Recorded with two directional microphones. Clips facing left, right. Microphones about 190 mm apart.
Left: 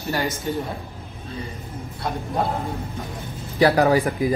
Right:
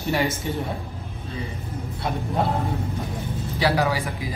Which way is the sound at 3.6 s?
55° left (ahead or behind).